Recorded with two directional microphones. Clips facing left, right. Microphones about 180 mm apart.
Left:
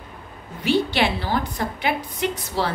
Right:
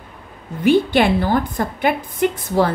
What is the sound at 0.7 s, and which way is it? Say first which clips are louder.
A woman's voice: right 6 dB; 50° right (ahead or behind).